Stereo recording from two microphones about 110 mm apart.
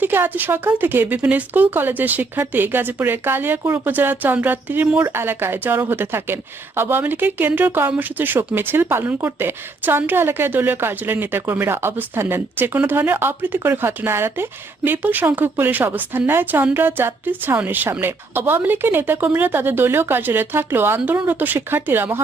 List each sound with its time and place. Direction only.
0.0 s speech: 15° right (ahead or behind)